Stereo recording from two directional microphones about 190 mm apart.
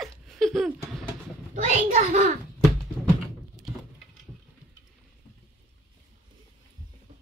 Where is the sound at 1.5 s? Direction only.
35° right (ahead or behind).